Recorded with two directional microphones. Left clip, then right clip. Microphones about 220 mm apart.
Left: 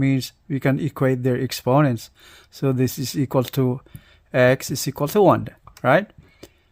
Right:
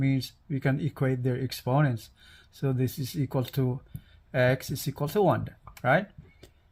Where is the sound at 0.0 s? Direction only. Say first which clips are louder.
Left 7 dB; 45° left (ahead or behind).